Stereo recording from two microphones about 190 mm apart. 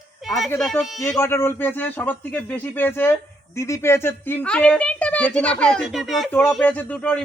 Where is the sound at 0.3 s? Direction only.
Centre (ahead or behind).